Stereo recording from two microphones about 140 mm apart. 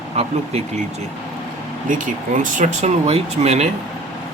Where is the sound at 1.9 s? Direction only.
65° right (ahead or behind); by 3.6 s 50° right (ahead or behind).